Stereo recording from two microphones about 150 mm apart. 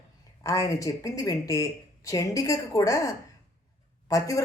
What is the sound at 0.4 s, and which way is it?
Speech, 20° left (ahead or behind).